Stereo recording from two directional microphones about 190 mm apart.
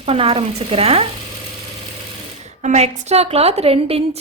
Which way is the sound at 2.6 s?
40° right (ahead or behind).